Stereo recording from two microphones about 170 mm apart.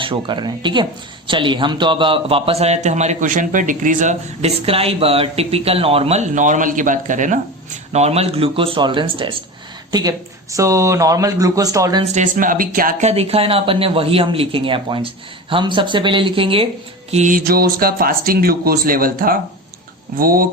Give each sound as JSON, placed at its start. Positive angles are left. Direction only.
{"t": 0.0, "sound": "speech", "side_deg": -30}
{"t": 12.1, "sound": "speech", "side_deg": -50}
{"t": 13.1, "sound": "speech", "side_deg": -35}
{"t": 17.1, "sound": "speech", "side_deg": -45}